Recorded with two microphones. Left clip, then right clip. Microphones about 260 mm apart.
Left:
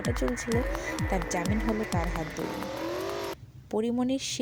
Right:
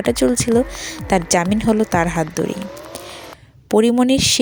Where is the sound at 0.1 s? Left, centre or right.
Right.